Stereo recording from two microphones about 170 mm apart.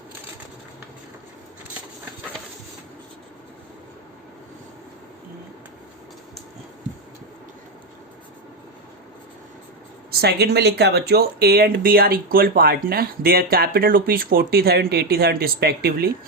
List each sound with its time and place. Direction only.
10.1 s speech: 70° right (ahead or behind)